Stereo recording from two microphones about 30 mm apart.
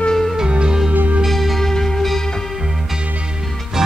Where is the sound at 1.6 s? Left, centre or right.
Centre.